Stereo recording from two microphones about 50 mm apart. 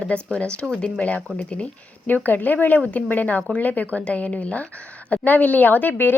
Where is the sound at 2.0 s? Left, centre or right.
Left.